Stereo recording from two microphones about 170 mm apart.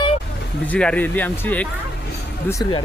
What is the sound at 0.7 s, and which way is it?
Speech, 5° left (ahead or behind).